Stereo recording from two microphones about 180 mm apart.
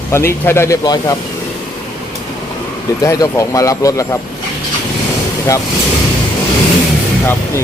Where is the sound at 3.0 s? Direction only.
20° left (ahead or behind).